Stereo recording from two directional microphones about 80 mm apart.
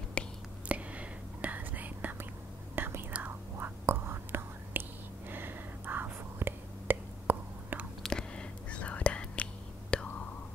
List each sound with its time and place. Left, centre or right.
0.2 s whispering: centre
0.7 s whispering: centre
8.0 s whispering: centre